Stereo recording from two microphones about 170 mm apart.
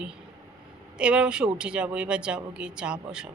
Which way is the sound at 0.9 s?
5° right (ahead or behind).